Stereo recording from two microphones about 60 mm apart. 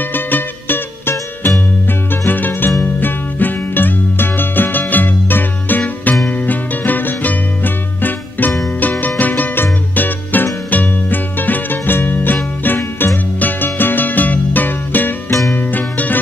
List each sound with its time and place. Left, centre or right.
0.0 s music: left